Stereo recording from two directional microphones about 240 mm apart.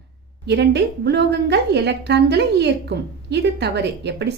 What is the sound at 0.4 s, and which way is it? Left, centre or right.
A woman's voice, right.